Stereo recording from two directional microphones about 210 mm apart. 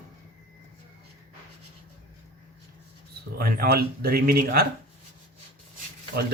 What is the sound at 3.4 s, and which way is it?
Speech, 45° right (ahead or behind).